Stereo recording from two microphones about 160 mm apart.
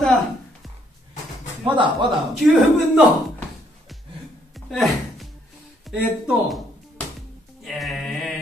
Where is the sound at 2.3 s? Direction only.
Centre (ahead or behind).